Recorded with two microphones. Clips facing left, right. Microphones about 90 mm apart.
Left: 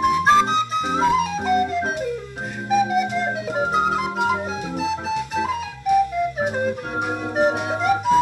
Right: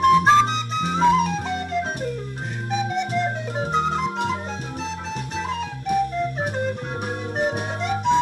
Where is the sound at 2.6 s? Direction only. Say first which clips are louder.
Left 6 dB; 5° left (ahead or behind).